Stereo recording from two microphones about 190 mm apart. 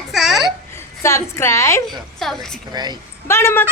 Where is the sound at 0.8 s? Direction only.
15° left (ahead or behind).